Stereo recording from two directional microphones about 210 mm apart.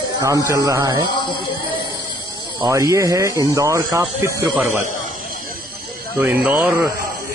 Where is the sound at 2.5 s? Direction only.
15° right (ahead or behind).